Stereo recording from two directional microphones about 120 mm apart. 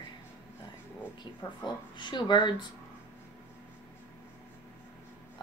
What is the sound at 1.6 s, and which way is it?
Speech, 40° left (ahead or behind).